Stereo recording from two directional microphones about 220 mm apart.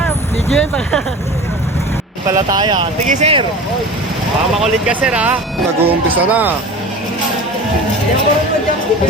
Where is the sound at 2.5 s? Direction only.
20° right (ahead or behind).